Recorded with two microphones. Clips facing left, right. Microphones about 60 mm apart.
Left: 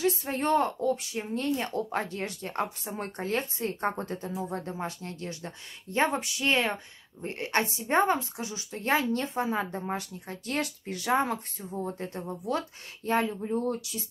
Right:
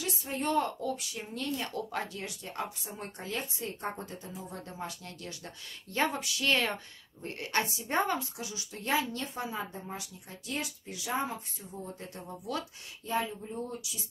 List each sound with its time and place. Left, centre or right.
0.0 s speech: left
9.6 s speech: left
13.0 s speech: left